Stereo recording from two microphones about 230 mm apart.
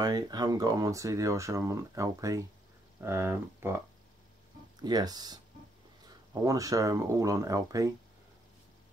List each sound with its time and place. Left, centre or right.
0.0 s speech: centre
4.8 s speech: centre
6.4 s speech: centre